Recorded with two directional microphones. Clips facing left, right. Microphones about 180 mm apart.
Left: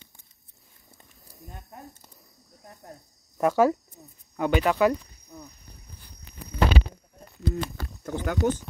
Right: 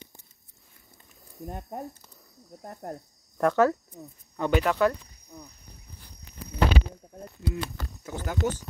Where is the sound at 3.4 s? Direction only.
10° left (ahead or behind).